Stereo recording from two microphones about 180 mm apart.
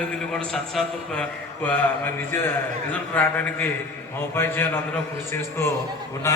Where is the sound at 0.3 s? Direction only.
5° left (ahead or behind).